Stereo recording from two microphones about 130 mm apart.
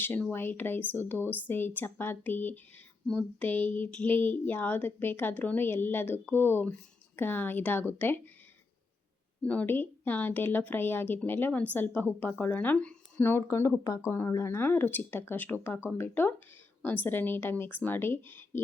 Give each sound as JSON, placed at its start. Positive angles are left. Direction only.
{"t": 0.0, "sound": "a woman's voice", "side_deg": 15}
{"t": 9.4, "sound": "a woman's voice", "side_deg": 10}